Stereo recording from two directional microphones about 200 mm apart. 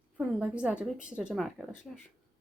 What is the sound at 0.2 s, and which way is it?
A woman's voice, 5° right (ahead or behind).